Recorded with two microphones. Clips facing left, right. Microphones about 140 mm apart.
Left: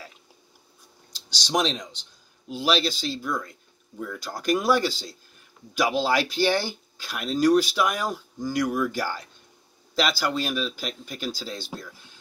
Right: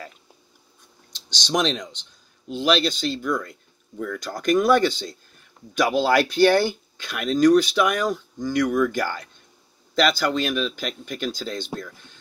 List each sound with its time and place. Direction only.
1.1 s speech: 10° left (ahead or behind)
6.1 s speech: centre (ahead or behind)